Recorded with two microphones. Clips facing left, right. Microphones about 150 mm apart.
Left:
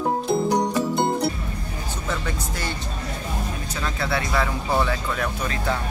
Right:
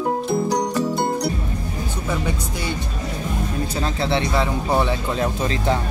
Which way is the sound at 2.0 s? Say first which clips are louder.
Right 3 dB; 10° right (ahead or behind).